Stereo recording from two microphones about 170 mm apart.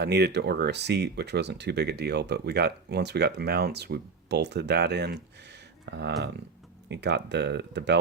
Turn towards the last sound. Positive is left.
turn(degrees=-90)